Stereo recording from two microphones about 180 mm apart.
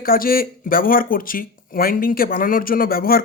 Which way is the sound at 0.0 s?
55° left (ahead or behind).